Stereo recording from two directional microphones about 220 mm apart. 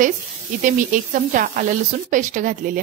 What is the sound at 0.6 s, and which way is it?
A woman's voice, 35° right (ahead or behind).